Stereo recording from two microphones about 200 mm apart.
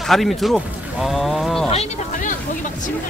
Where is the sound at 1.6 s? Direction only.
35° left (ahead or behind).